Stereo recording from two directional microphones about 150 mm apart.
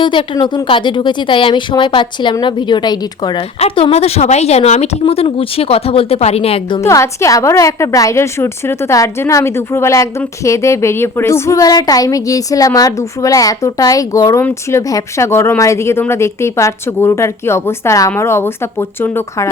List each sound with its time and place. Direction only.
0.0 s a woman's voice: 30° left (ahead or behind)
3.6 s a woman's voice: 40° left (ahead or behind)
6.8 s a woman's voice: 20° left (ahead or behind)